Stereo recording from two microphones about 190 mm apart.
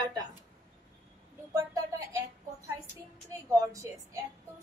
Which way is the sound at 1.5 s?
15° right (ahead or behind).